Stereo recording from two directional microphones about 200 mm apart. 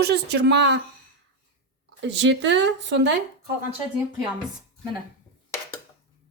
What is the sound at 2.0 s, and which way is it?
Speech, 65° right (ahead or behind).